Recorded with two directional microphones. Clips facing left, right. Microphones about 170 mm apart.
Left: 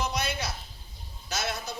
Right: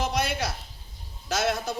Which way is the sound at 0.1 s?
90° right.